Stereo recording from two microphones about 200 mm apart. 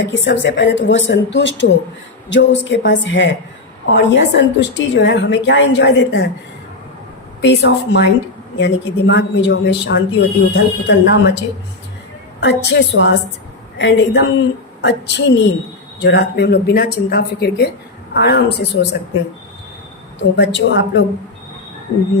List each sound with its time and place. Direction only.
0.1 s a woman's voice: 65° left (ahead or behind)
7.4 s a woman's voice: 60° left (ahead or behind)
12.4 s a woman's voice: 60° left (ahead or behind)
20.3 s a woman's voice: 60° left (ahead or behind)